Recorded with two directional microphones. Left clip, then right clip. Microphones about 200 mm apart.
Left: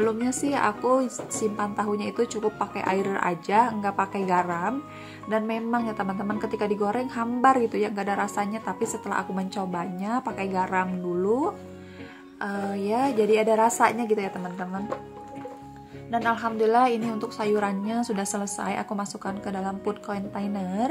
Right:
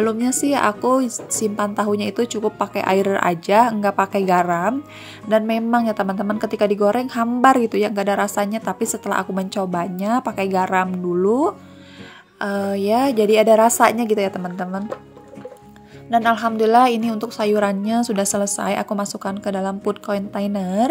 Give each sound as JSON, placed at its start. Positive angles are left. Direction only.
{"t": 0.0, "sound": "a woman's voice", "side_deg": -40}
{"t": 16.1, "sound": "a woman's voice", "side_deg": -40}